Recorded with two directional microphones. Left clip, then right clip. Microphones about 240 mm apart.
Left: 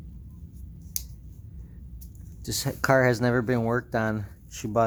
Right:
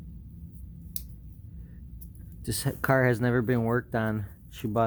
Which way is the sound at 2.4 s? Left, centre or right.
Centre.